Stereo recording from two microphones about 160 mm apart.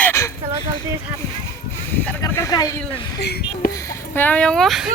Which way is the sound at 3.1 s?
85° left.